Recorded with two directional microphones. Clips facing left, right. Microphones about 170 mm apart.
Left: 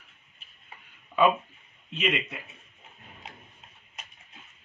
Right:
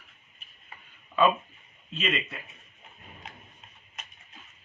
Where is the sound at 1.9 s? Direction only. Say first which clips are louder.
Left 2 dB; 15° left (ahead or behind).